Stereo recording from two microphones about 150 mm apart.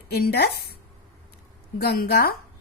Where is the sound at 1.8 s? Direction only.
90° left.